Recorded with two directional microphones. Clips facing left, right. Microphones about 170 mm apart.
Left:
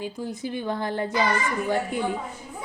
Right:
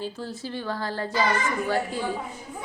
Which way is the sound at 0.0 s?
15° left (ahead or behind).